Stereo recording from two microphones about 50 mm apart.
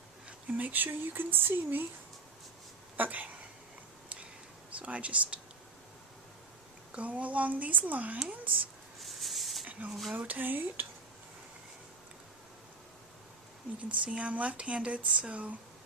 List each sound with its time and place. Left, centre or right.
0.3 s speech: right
3.0 s a woman's voice: right
4.8 s speech: right
6.9 s speech: right
9.0 s a sound: centre
9.6 s a sound: right
9.9 s speech: centre
10.2 s speech: right
14.0 s speech: right